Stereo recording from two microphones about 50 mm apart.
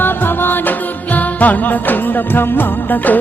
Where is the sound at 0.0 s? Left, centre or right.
Left.